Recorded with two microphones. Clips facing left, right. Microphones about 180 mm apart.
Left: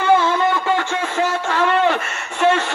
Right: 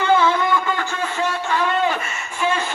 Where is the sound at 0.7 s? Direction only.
75° left (ahead or behind).